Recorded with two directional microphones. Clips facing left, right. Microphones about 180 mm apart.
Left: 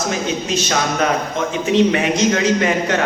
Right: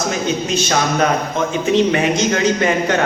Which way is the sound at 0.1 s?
30° right (ahead or behind).